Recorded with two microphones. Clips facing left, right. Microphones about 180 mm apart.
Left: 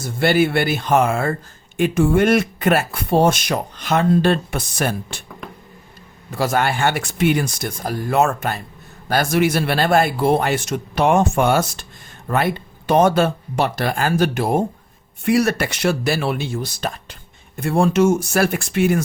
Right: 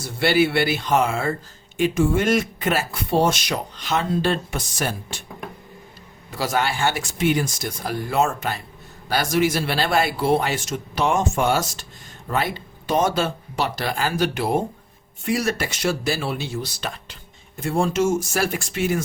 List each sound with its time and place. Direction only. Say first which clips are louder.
0.0 s speech: left 2 dB; 50° left (ahead or behind)
6.3 s speech: left 4 dB; 50° left (ahead or behind)
15.2 s speech: left 6 dB; 65° left (ahead or behind); by 17.2 s 45° left (ahead or behind)
17.6 s speech: left 5 dB; 60° left (ahead or behind)